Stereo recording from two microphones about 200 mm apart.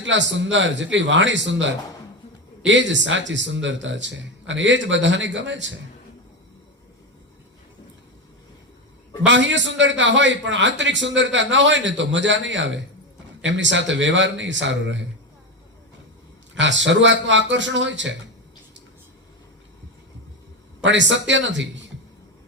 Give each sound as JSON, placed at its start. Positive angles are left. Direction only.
{"t": 0.0, "sound": "a man's voice", "side_deg": -65}
{"t": 9.2, "sound": "a man's voice", "side_deg": -65}
{"t": 16.6, "sound": "a man's voice", "side_deg": -65}
{"t": 20.8, "sound": "a man's voice", "side_deg": -65}